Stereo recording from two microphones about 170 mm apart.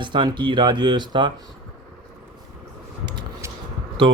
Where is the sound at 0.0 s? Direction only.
25° right (ahead or behind).